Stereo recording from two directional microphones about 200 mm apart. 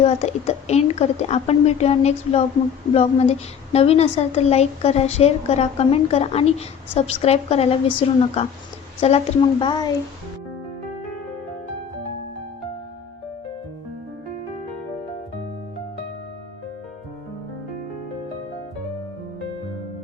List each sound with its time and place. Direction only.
0.0 s a woman's voice: 30° left (ahead or behind)